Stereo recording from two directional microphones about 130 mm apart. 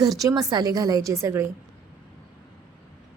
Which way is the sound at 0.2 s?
30° right (ahead or behind).